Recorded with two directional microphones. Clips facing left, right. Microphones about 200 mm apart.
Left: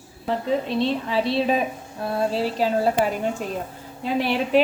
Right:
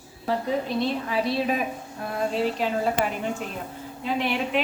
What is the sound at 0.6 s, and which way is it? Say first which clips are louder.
A woman's voice: left 3 dB; 25° left (ahead or behind).